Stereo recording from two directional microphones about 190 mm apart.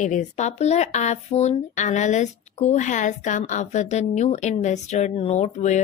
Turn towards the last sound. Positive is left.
turn(degrees=35)  # may be behind; listen again after turning